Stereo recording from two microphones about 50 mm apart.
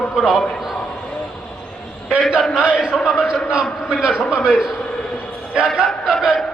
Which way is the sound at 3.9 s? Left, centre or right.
Centre.